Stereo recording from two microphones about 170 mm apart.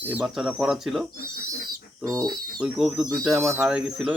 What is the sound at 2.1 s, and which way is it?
Speech, 20° right (ahead or behind).